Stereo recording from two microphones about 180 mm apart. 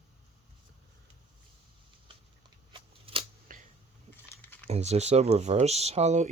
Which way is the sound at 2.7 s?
30° right (ahead or behind).